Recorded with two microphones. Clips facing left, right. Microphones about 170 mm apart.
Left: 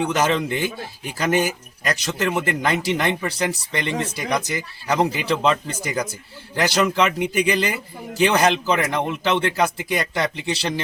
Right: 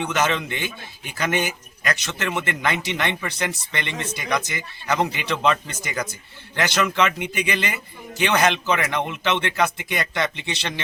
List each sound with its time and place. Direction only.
0.0 s a man's voice: 35° left (ahead or behind)